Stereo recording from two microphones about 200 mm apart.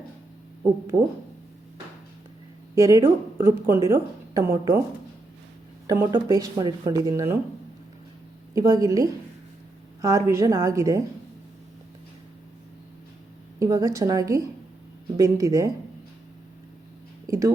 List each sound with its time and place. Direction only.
2.7 s a woman's voice: 15° right (ahead or behind)
5.9 s a woman's voice: 15° right (ahead or behind)
8.5 s a woman's voice: 20° right (ahead or behind)
13.6 s a woman's voice: 15° right (ahead or behind)
17.2 s speech: 15° right (ahead or behind)